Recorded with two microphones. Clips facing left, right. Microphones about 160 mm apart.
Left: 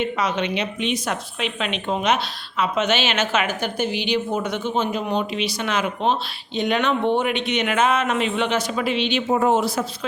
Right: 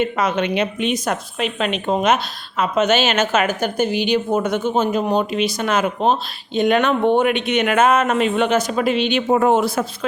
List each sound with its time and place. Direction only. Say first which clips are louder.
0.0 s a woman's voice: right 4 dB; 50° right (ahead or behind)